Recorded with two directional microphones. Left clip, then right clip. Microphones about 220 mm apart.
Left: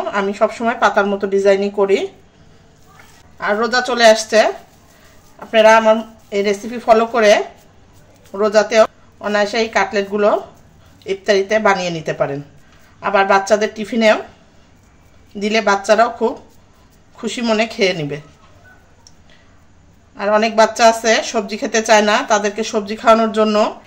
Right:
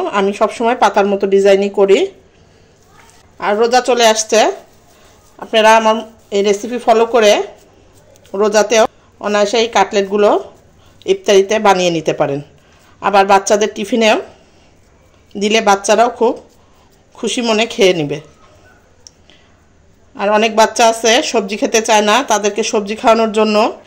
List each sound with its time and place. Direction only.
0.1 s speech: 30° right (ahead or behind)
3.5 s speech: 35° right (ahead or behind)
15.3 s speech: 35° right (ahead or behind)
20.2 s speech: 35° right (ahead or behind)